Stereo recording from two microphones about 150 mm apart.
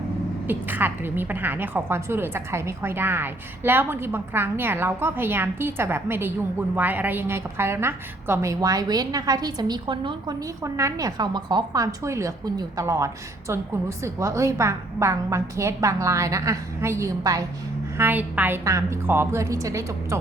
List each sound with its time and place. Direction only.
0.4 s a woman's voice: 15° right (ahead or behind); by 10.3 s 30° right (ahead or behind)
10.6 s a woman's voice: 20° right (ahead or behind)